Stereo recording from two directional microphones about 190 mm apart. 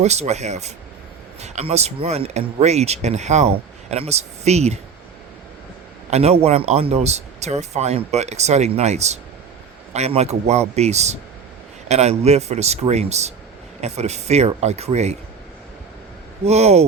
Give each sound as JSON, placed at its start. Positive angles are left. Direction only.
{"t": 0.0, "sound": "speech", "side_deg": -35}
{"t": 6.1, "sound": "speech", "side_deg": -35}
{"t": 16.4, "sound": "speech", "side_deg": -35}